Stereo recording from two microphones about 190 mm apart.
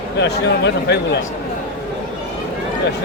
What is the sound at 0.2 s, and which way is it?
Speech, 65° left (ahead or behind).